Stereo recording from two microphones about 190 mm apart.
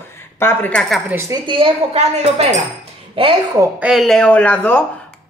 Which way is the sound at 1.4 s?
25° right (ahead or behind).